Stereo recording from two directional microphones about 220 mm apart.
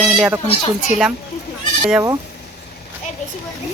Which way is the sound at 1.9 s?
10° right (ahead or behind).